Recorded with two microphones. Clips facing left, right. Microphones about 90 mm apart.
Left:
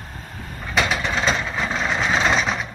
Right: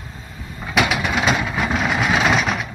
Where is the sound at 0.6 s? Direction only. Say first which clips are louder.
Right 2 dB; 10° right (ahead or behind).